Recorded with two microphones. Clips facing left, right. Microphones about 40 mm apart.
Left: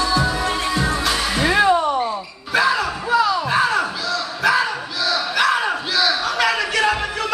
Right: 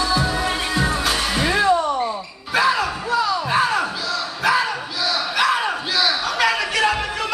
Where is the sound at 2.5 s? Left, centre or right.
Centre.